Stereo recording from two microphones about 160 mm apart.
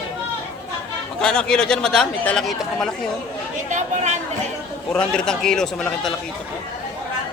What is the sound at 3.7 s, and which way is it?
Speech, 45° right (ahead or behind).